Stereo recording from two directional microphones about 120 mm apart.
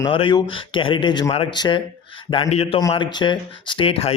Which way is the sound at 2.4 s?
60° left (ahead or behind).